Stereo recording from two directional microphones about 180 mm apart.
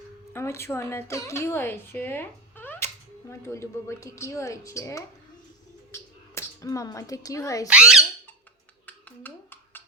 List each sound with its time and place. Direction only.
0.3 s a woman's voice: 15° left (ahead or behind)
7.7 s speech: 5° right (ahead or behind)
8.9 s a sound: 10° left (ahead or behind)